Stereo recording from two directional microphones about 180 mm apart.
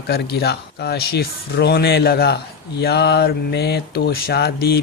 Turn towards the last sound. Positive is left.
turn(degrees=60)  # may be behind; listen again after turning